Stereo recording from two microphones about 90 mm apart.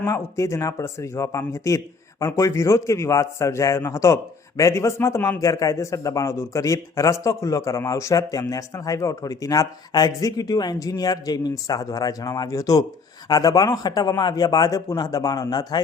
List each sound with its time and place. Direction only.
0.0 s a man's voice: 35° left (ahead or behind)